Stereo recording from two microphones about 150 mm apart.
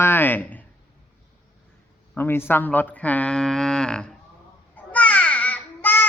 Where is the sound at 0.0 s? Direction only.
15° left (ahead or behind).